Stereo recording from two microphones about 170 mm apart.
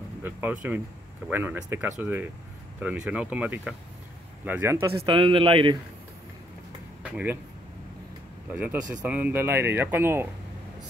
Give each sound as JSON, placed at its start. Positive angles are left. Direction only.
{"t": 0.2, "sound": "speech", "side_deg": -10}
{"t": 5.0, "sound": "a man's voice", "side_deg": -30}
{"t": 7.0, "sound": "speech", "side_deg": -10}
{"t": 8.5, "sound": "speech", "side_deg": -10}